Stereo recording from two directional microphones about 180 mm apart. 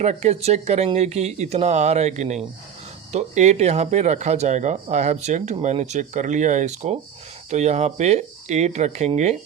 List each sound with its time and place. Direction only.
0.0 s speech: 40° right (ahead or behind)